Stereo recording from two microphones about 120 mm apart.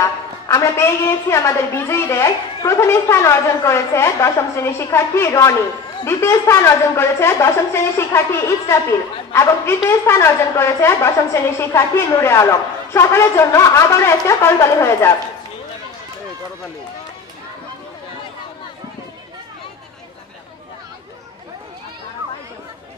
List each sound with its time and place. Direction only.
0.0 s a woman's voice: 25° left (ahead or behind)